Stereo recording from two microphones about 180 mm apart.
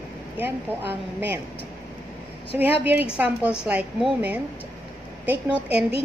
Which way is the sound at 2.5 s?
10° right (ahead or behind).